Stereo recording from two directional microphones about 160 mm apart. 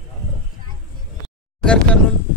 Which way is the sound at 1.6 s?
5° left (ahead or behind).